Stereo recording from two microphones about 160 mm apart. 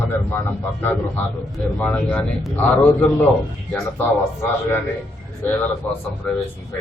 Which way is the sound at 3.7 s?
10° left (ahead or behind).